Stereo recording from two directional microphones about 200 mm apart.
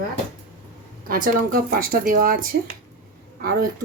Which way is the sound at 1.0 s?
45° right (ahead or behind).